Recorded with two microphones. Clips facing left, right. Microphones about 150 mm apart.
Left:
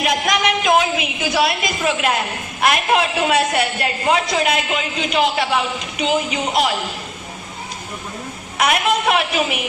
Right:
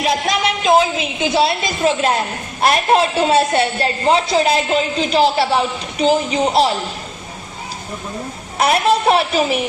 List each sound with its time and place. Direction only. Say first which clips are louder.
0.0 s a woman's voice: right 1 dB; 30° right (ahead or behind)
8.5 s a woman's voice: right 3 dB; 35° right (ahead or behind)